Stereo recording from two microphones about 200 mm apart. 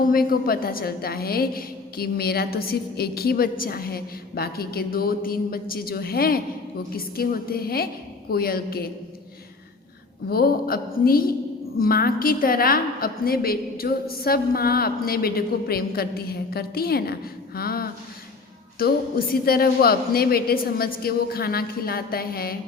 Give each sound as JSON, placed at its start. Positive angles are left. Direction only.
{"t": 0.0, "sound": "a woman's voice", "side_deg": 45}
{"t": 10.2, "sound": "a woman's voice", "side_deg": 50}
{"t": 19.3, "sound": "a woman's voice", "side_deg": 50}